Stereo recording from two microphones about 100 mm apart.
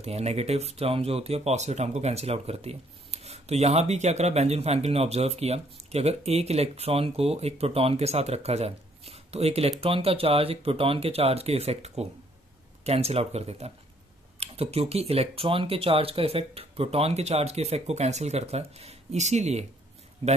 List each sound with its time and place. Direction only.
0.0 s speech: 90° right
20.2 s speech: 90° right